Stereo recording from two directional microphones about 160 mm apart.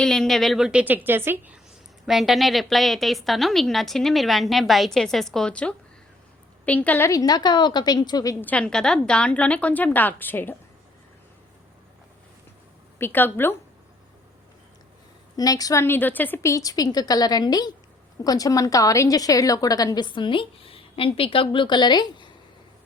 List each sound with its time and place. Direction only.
0.0 s a woman's voice: centre (ahead or behind); by 1.5 s 15° right (ahead or behind)
2.0 s a woman's voice: centre (ahead or behind); by 8.4 s 20° left (ahead or behind)
8.4 s a woman's voice: 5° left (ahead or behind)
13.0 s a woman's voice: 10° left (ahead or behind)
15.4 s a woman's voice: 25° left (ahead or behind)